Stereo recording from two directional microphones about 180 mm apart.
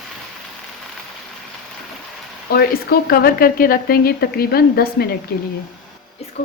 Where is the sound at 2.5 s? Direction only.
60° left (ahead or behind).